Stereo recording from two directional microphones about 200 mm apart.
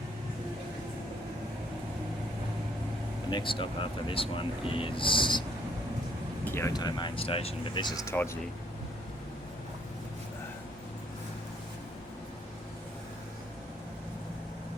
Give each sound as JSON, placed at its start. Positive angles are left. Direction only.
{"t": 3.2, "sound": "speech", "side_deg": 25}
{"t": 6.4, "sound": "speech", "side_deg": 10}